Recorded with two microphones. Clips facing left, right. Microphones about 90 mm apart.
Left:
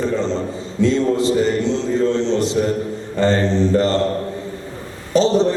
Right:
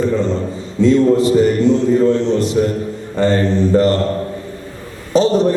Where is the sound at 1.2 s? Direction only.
25° left (ahead or behind).